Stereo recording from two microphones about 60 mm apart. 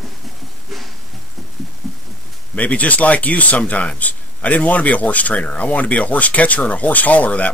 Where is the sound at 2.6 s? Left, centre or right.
Left.